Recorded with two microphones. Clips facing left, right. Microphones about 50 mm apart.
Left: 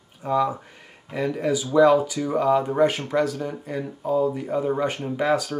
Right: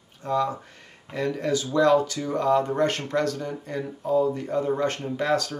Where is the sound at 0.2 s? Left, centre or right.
Centre.